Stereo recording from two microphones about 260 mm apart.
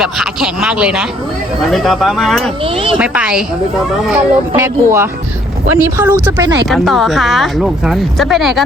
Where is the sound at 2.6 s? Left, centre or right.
Right.